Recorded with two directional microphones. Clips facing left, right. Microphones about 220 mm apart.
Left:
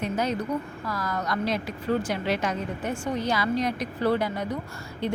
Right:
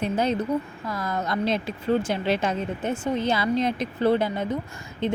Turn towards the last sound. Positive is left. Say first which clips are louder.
# right 3 dB
turn(degrees=-20)  # may be behind; listen again after turning